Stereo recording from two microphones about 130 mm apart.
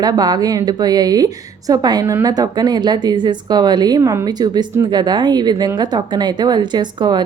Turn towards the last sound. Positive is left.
turn(degrees=-35)  # may be behind; listen again after turning